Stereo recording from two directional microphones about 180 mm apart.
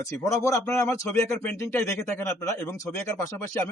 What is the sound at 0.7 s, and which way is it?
A man's voice, 5° left (ahead or behind).